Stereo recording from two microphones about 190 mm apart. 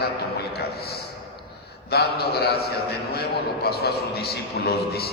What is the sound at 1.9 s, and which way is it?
A man's voice, 55° left (ahead or behind).